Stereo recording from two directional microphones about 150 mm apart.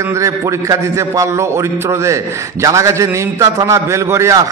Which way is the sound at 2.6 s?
20° right (ahead or behind).